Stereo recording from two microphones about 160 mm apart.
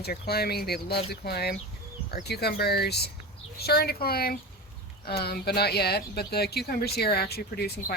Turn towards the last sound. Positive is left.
turn(degrees=85)